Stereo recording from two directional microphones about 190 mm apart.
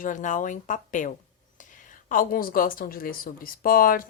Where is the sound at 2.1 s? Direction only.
45° left (ahead or behind).